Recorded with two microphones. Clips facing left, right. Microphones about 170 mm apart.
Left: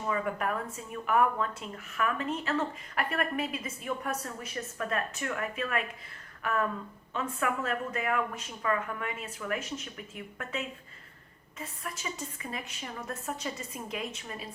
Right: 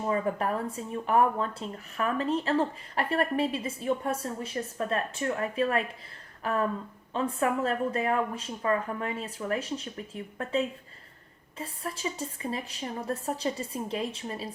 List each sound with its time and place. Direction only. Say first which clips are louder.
0.0 s speech: right 3 dB; 30° right (ahead or behind)
6.4 s a sound: right 2 dB; 30° right (ahead or behind)
7.1 s speech: right 5 dB; 30° right (ahead or behind)